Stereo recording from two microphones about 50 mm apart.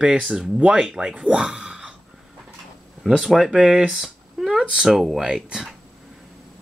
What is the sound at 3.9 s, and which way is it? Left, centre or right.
Speech, centre.